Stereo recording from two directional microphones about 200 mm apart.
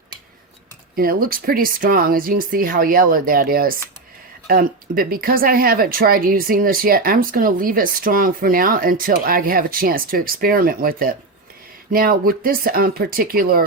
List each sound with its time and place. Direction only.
0.9 s speech: 45° right (ahead or behind)